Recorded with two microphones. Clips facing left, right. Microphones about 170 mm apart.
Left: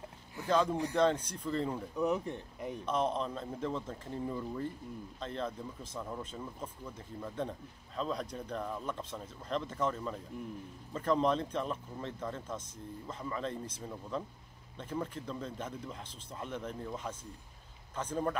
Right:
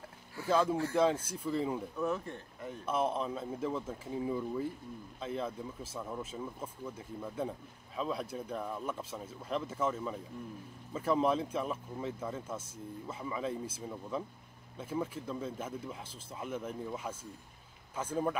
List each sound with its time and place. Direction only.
0.5 s speech: 5° right (ahead or behind)
2.0 s speech: 15° left (ahead or behind)
2.8 s speech: 5° right (ahead or behind)